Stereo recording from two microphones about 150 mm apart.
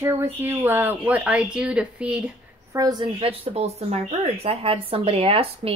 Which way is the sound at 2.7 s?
25° right (ahead or behind).